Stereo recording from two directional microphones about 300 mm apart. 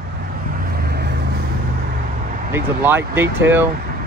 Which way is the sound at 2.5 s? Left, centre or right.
Centre.